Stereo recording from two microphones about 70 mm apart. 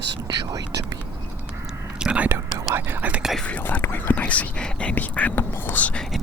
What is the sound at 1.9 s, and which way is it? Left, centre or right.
Whispering, centre.